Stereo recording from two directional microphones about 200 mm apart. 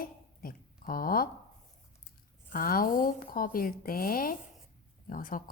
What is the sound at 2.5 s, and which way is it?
A woman's voice, 45° left (ahead or behind).